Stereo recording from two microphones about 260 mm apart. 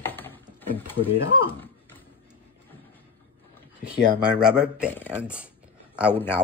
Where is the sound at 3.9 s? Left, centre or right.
Centre.